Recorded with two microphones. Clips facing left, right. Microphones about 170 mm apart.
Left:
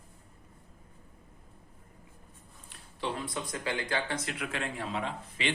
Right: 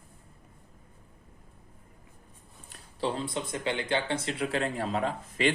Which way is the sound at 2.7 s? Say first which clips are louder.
Right 4 dB; 35° right (ahead or behind).